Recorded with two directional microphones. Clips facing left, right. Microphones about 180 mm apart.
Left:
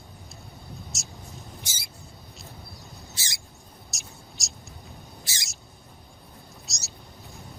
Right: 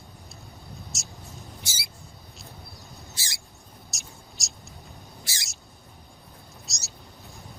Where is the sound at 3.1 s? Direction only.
20° left (ahead or behind).